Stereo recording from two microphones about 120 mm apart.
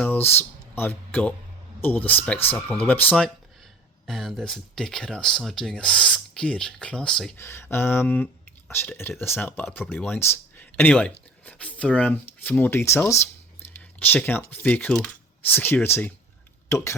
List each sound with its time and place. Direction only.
0.0 s speech: 15° left (ahead or behind)
7.3 s a sound: 20° left (ahead or behind)
9.2 s speech: 15° left (ahead or behind)